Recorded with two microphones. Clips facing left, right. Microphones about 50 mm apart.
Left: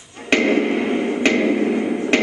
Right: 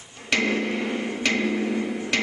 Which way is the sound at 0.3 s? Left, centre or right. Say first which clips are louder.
Left 7 dB; left.